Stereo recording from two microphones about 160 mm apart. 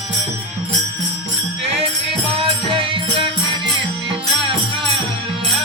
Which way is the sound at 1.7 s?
35° right (ahead or behind).